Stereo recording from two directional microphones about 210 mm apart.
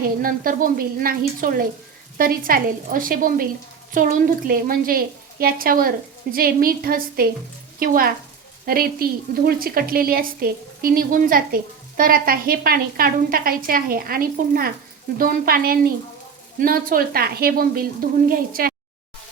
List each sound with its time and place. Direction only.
0.0 s a woman's voice: 40° right (ahead or behind)